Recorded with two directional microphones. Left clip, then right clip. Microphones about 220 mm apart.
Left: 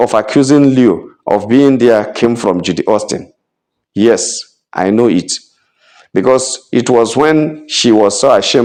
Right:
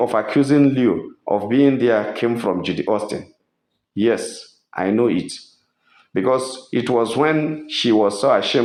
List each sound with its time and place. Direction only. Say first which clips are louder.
0.0 s speech: left 7 dB; 45° left (ahead or behind)